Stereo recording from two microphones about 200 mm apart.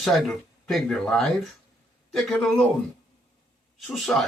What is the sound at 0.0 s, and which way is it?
Speech, centre (ahead or behind).